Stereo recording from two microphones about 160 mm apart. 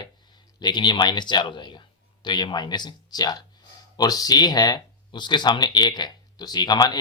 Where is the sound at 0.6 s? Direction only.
30° left (ahead or behind).